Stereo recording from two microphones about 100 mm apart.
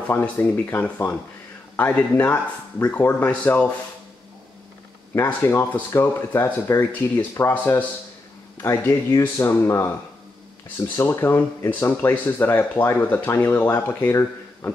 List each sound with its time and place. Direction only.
0.1 s speech: 20° left (ahead or behind)
5.1 s speech: 20° left (ahead or behind)
8.5 s speech: 30° left (ahead or behind)
11.0 s speech: 25° left (ahead or behind)